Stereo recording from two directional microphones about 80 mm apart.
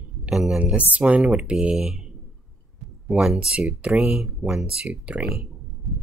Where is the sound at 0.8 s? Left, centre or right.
Centre.